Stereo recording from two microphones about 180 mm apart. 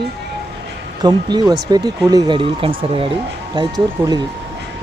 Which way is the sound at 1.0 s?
20° right (ahead or behind).